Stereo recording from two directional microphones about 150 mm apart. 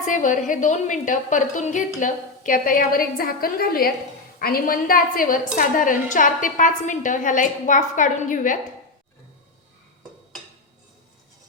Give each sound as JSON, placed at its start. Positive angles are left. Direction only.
{"t": 0.0, "sound": "a woman's voice", "side_deg": 60}